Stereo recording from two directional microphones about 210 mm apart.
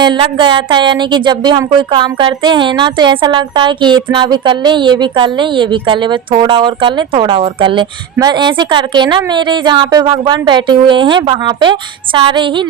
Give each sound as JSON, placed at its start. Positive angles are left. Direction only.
{"t": 0.0, "sound": "speech", "side_deg": -20}